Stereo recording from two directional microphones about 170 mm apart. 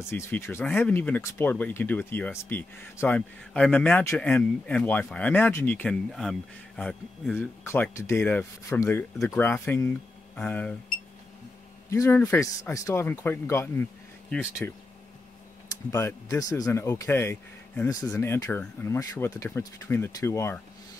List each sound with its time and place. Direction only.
0.1 s speech: 15° left (ahead or behind)
11.9 s speech: 15° left (ahead or behind)
15.9 s speech: 15° left (ahead or behind)